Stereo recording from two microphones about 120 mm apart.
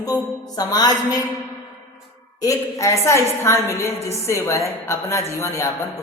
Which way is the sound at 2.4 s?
30° left (ahead or behind).